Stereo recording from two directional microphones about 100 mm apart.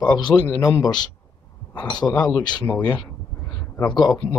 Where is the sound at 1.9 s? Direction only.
45° left (ahead or behind).